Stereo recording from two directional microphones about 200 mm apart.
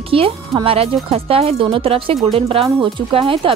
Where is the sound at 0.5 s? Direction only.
25° right (ahead or behind).